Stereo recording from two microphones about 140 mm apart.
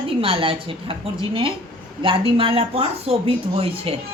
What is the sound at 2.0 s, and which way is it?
A woman's voice, 40° right (ahead or behind).